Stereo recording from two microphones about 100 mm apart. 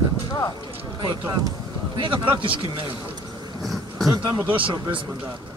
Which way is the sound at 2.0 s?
55° right (ahead or behind).